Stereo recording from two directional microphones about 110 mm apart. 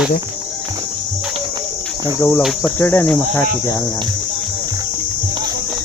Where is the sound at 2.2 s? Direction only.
25° left (ahead or behind).